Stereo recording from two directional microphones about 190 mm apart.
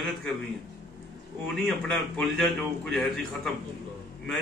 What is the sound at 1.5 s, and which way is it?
A man's voice, centre (ahead or behind).